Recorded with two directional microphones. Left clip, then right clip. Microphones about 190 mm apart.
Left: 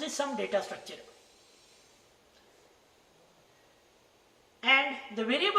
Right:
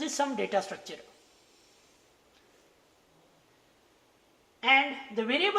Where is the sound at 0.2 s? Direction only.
25° right (ahead or behind).